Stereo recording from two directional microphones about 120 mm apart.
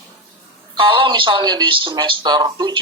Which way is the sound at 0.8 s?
45° right (ahead or behind).